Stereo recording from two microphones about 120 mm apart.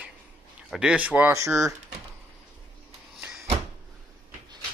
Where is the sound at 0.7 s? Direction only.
10° right (ahead or behind).